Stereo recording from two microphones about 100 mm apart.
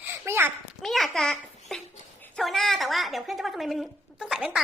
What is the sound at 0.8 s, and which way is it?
A child's voice, centre (ahead or behind).